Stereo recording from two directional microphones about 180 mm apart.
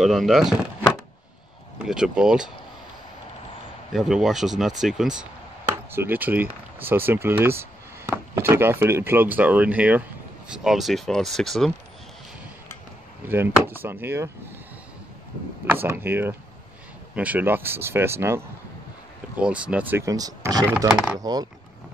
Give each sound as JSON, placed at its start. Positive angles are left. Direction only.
{"t": 0.0, "sound": "speech", "side_deg": 0}
{"t": 1.8, "sound": "speech", "side_deg": -5}
{"t": 3.9, "sound": "speech", "side_deg": 0}
{"t": 13.3, "sound": "speech", "side_deg": -10}
{"t": 15.6, "sound": "speech", "side_deg": -10}
{"t": 20.9, "sound": "speech", "side_deg": -5}
{"t": 21.2, "sound": "speech", "side_deg": -20}